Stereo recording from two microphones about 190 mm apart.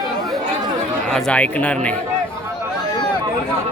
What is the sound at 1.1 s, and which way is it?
Speech, 5° left (ahead or behind).